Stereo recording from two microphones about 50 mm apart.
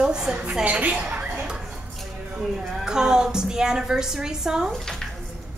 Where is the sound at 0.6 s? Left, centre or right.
Right.